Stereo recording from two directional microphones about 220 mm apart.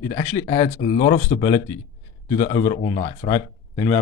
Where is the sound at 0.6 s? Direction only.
30° left (ahead or behind).